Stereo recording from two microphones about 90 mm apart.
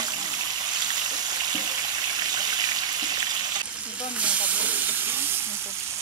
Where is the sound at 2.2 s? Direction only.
50° right (ahead or behind).